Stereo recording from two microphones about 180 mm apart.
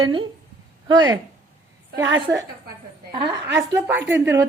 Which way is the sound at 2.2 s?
20° right (ahead or behind).